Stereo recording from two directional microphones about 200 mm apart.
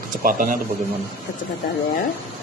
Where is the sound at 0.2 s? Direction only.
45° right (ahead or behind).